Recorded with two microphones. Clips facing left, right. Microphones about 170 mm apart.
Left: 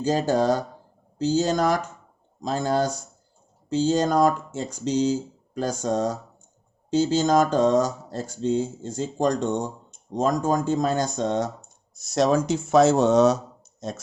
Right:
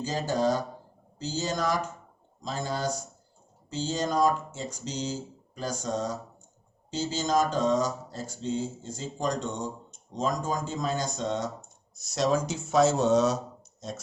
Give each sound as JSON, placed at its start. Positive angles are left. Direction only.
{"t": 0.0, "sound": "speech", "side_deg": 55}